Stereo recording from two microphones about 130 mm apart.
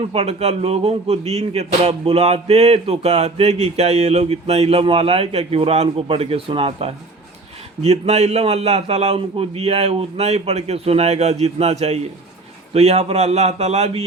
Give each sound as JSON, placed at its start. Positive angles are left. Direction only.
{"t": 0.1, "sound": "a man's voice", "side_deg": -50}